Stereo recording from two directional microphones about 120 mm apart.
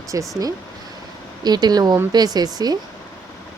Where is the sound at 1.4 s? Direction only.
35° right (ahead or behind).